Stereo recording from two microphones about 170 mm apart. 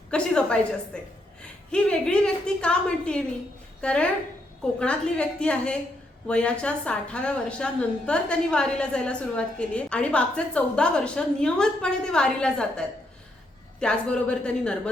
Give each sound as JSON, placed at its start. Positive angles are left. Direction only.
{"t": 0.1, "sound": "a woman's voice", "side_deg": 5}